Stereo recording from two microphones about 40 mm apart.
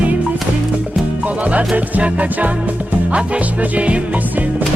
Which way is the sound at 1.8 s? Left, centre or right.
Right.